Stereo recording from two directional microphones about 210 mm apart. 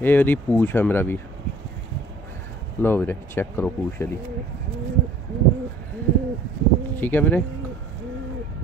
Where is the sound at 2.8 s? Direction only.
10° left (ahead or behind).